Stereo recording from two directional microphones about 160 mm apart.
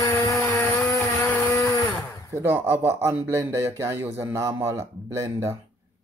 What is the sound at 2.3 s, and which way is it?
Speech, 15° right (ahead or behind).